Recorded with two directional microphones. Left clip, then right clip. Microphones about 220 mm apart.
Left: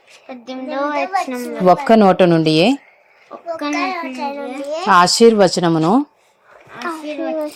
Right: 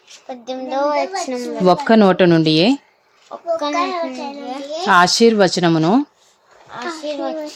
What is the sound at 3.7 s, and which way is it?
Speech, 15° left (ahead or behind).